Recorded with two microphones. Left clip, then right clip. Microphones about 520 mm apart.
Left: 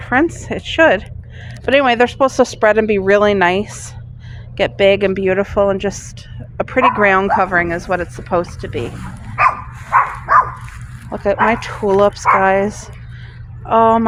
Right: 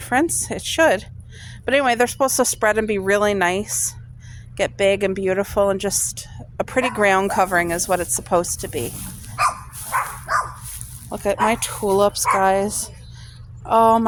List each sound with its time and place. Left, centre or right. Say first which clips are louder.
0.0 s a woman's voice: left 4 dB; right
9.9 s a sound: left 10 dB; right
11.1 s a woman's voice: left 5 dB; right